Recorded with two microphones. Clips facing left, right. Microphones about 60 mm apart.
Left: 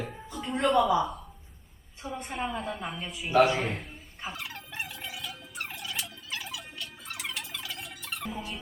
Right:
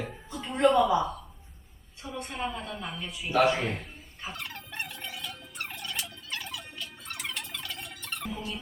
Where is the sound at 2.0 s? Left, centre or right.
Left.